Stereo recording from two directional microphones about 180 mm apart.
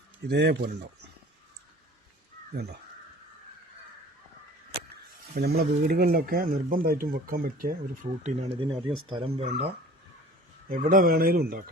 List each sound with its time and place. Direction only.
0.3 s speech: 60° right (ahead or behind)
5.4 s speech: 60° right (ahead or behind)
8.2 s speech: 35° right (ahead or behind)
10.7 s speech: 50° right (ahead or behind)